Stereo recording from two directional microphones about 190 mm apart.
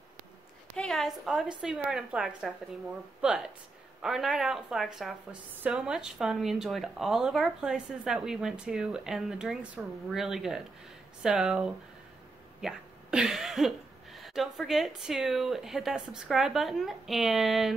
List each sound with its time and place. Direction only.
0.7 s speech: centre (ahead or behind)